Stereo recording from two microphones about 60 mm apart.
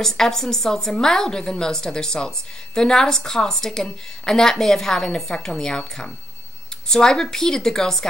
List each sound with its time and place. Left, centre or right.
0.0 s a woman's voice: centre